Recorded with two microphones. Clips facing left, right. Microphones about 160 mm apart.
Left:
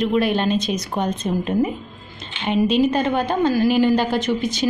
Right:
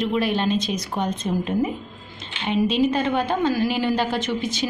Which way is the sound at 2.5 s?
45° left (ahead or behind).